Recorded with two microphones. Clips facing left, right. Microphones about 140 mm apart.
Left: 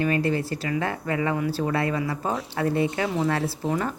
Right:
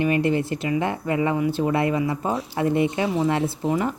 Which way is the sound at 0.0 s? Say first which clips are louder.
Right 3 dB; 20° right (ahead or behind).